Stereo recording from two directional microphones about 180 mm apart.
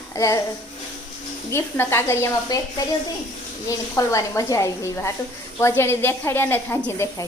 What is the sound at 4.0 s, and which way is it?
A woman's voice, 20° left (ahead or behind).